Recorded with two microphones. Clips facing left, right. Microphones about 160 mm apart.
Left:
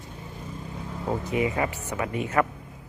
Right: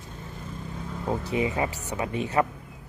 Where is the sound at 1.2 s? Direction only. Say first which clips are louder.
Left 1 dB; 25° right (ahead or behind).